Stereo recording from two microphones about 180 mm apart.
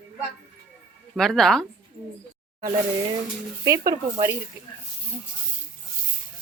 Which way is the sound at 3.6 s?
20° right (ahead or behind).